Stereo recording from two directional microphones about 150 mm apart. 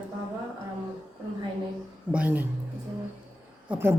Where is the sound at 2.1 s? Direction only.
10° right (ahead or behind).